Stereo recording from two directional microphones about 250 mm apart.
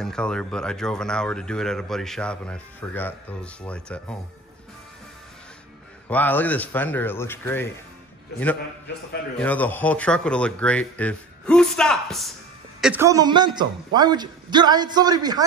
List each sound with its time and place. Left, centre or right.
0.0 s speech: centre
6.0 s a man's voice: centre
9.4 s a man's voice: centre